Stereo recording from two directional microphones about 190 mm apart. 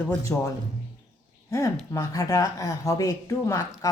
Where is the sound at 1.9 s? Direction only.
20° left (ahead or behind).